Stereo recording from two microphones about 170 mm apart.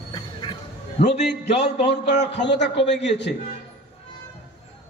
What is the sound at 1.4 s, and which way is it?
A man's voice, 90° left.